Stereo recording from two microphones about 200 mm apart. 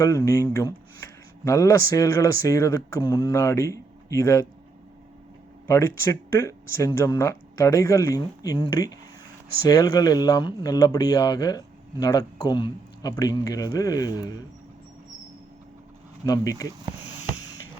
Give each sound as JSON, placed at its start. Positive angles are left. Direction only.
{"t": 0.0, "sound": "speech", "side_deg": 15}
{"t": 5.6, "sound": "speech", "side_deg": 10}
{"t": 16.2, "sound": "speech", "side_deg": 15}